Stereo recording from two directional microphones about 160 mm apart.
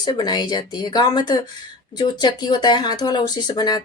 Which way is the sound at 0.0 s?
25° left (ahead or behind).